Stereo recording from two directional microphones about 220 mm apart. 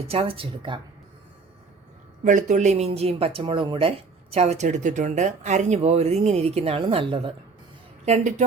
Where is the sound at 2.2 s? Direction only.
35° right (ahead or behind).